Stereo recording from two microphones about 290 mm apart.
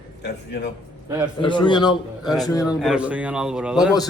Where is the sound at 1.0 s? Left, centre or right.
Centre.